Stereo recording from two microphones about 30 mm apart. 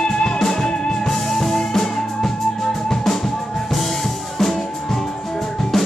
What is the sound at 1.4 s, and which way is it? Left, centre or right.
Music, centre.